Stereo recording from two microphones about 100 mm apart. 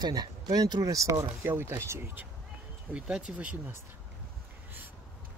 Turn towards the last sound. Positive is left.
turn(degrees=-15)  # may be behind; listen again after turning